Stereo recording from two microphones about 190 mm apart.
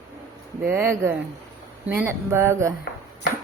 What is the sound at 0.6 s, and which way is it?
Speech, 10° right (ahead or behind).